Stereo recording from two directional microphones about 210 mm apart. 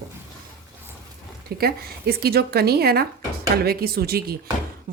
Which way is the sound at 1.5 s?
45° right (ahead or behind).